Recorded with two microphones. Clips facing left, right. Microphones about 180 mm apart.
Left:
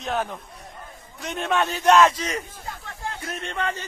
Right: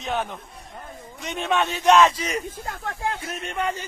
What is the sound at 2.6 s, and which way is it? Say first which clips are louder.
Speech: right 5 dB; 50° right (ahead or behind).